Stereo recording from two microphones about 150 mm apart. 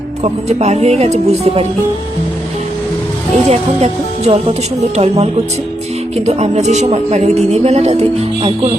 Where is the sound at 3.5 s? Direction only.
45° right (ahead or behind).